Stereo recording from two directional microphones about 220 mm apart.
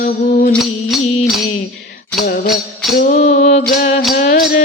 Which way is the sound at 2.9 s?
35° left (ahead or behind).